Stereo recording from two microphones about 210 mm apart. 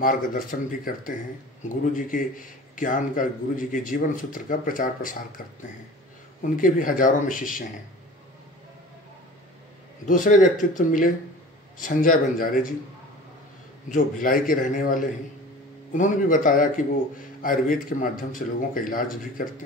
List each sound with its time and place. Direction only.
0.0 s speech: 40° left (ahead or behind)
6.4 s speech: 40° left (ahead or behind)
10.0 s speech: 40° left (ahead or behind)
13.8 s speech: 40° left (ahead or behind)